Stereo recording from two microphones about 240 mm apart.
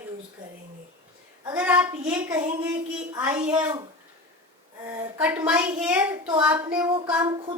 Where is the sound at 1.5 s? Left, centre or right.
Centre.